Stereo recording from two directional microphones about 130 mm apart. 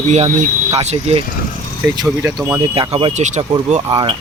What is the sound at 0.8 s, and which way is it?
Speech, 50° right (ahead or behind).